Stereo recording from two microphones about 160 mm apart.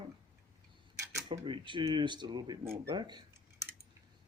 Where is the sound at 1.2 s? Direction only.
30° right (ahead or behind).